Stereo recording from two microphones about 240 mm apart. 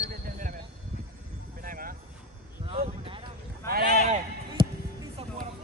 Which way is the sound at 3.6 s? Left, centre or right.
Right.